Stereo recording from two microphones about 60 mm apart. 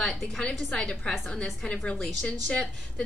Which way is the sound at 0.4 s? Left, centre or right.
Centre.